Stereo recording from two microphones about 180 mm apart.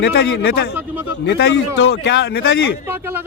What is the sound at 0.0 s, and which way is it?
A man's voice, 70° left (ahead or behind).